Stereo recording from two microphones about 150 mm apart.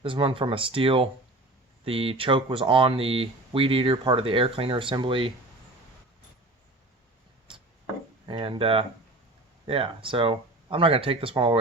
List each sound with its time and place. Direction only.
0.0 s speech: 35° right (ahead or behind)
8.3 s speech: 35° right (ahead or behind)